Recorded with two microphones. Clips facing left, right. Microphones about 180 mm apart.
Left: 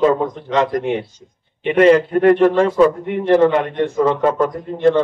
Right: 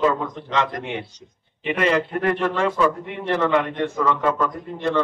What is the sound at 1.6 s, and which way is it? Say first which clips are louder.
A man's voice: left 9 dB; 35° left (ahead or behind).